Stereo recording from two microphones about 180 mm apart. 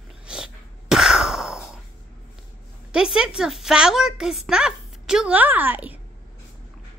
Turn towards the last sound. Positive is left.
turn(degrees=-10)  # may be behind; listen again after turning